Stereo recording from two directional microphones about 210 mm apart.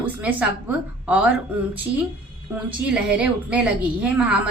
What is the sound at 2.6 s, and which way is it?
A woman's voice, 5° right (ahead or behind).